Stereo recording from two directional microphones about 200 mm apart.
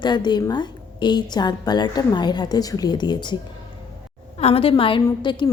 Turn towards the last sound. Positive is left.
turn(degrees=25)  # may be behind; listen again after turning